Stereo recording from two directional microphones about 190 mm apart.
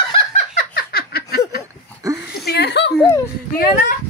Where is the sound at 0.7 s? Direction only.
55° left (ahead or behind).